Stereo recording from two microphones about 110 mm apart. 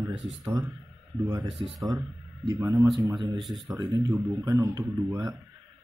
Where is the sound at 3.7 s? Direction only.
35° right (ahead or behind).